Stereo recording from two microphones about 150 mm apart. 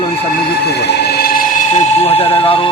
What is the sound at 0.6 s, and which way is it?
Speech, 90° left.